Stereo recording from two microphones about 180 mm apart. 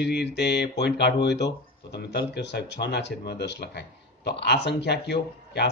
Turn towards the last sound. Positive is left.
turn(degrees=65)  # may be behind; listen again after turning